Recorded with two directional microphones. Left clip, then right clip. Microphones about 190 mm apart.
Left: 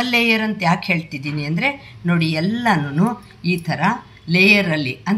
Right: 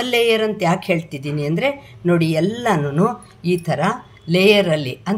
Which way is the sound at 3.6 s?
60° right (ahead or behind).